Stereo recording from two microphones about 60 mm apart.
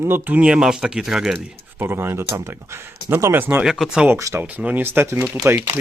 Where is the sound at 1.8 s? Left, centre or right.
Right.